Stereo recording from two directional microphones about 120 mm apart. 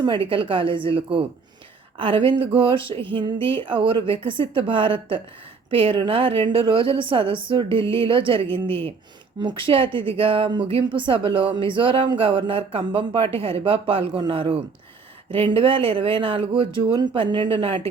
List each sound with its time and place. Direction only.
0.0 s speech: 45° right (ahead or behind)